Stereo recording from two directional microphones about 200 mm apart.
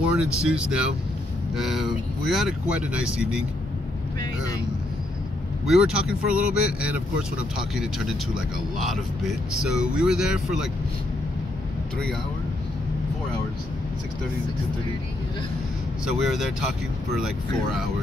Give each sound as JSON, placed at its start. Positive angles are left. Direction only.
{"t": 0.0, "sound": "speech", "side_deg": -5}
{"t": 5.7, "sound": "speech", "side_deg": -5}
{"t": 9.6, "sound": "speech", "side_deg": -5}